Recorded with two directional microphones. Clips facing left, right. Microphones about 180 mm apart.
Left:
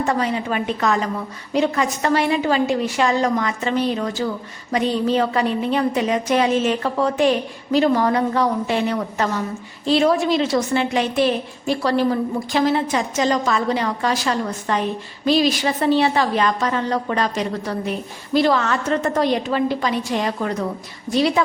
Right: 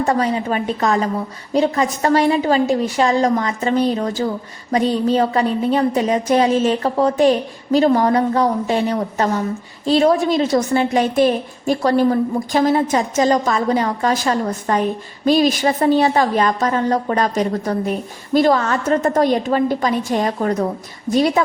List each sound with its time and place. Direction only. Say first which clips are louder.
0.0 s a woman's voice: right 3 dB; 35° right (ahead or behind)